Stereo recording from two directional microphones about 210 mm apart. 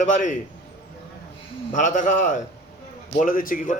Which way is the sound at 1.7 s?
35° left (ahead or behind).